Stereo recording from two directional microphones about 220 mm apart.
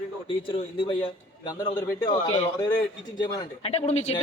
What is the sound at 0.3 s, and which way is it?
A man's voice, 20° left (ahead or behind).